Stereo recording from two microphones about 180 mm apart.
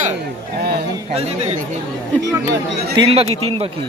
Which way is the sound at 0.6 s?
60° right (ahead or behind).